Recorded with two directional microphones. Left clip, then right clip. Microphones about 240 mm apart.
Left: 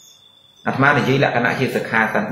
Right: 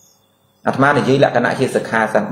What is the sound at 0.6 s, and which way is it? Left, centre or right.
Speech, left.